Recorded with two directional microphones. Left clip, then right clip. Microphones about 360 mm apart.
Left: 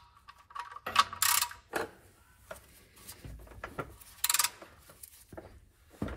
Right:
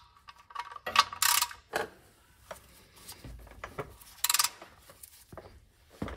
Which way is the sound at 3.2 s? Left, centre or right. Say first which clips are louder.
Left 1 dB; right.